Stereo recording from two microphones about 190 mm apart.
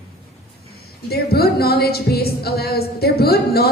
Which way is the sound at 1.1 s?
55° left (ahead or behind).